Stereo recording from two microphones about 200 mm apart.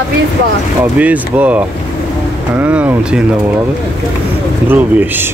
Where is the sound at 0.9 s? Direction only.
5° right (ahead or behind).